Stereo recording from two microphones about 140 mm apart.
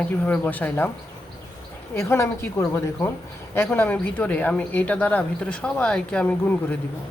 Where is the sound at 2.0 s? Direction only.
20° left (ahead or behind).